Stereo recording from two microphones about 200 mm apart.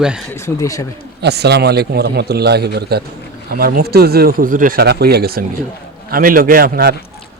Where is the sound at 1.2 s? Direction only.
55° right (ahead or behind).